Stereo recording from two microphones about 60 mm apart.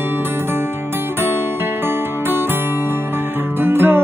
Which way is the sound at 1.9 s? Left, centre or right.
Right.